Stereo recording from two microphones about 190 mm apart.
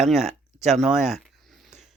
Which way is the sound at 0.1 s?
Centre (ahead or behind).